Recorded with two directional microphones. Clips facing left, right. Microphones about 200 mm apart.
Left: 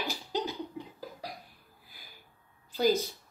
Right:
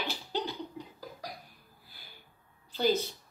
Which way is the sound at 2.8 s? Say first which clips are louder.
Left 2 dB; 10° left (ahead or behind).